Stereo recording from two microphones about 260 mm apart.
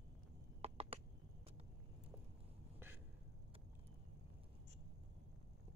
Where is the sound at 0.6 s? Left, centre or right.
Right.